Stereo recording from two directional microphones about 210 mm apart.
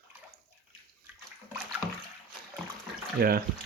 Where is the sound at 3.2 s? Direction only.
50° right (ahead or behind).